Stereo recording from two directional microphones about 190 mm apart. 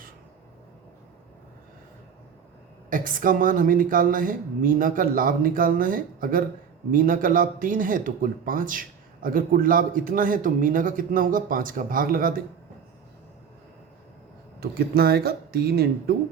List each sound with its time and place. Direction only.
2.9 s speech: 45° right (ahead or behind)
14.6 s speech: 55° right (ahead or behind)